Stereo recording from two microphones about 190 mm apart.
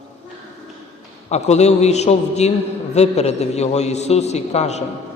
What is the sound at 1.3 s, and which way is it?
A man's voice, 35° left (ahead or behind).